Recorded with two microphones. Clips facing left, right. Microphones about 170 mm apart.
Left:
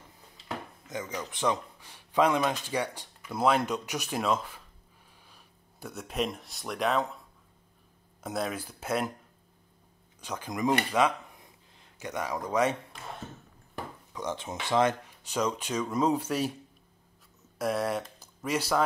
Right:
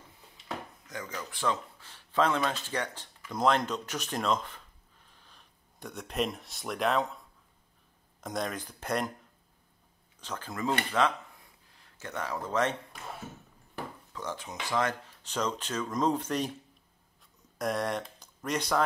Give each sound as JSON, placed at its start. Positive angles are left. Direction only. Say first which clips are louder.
{"t": 0.8, "sound": "speech", "louder": "left 5 dB", "side_deg": 20}
{"t": 8.2, "sound": "speech", "louder": "left 2 dB", "side_deg": 5}
{"t": 10.2, "sound": "speech", "louder": "left 4 dB", "side_deg": 15}
{"t": 14.1, "sound": "speech", "louder": "left 4 dB", "side_deg": 20}
{"t": 15.2, "sound": "speech", "louder": "left 3 dB", "side_deg": 10}
{"t": 17.6, "sound": "speech", "louder": "left 2 dB", "side_deg": 5}